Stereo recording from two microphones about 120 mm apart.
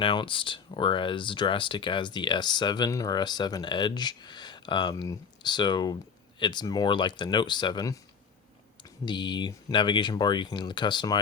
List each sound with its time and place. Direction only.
0.0 s speech: 45° left (ahead or behind)